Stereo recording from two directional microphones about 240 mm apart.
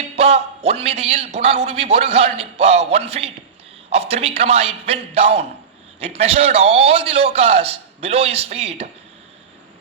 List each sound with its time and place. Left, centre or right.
0.2 s a man's voice: right